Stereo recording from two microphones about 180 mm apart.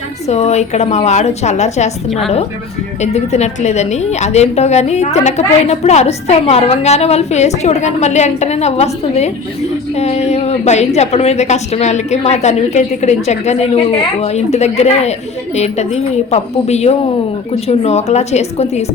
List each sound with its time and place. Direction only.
0.3 s a woman's voice: 40° left (ahead or behind)
3.0 s a woman's voice: 40° left (ahead or behind)